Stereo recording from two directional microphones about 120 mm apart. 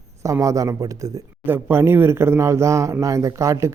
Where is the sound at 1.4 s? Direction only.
20° right (ahead or behind).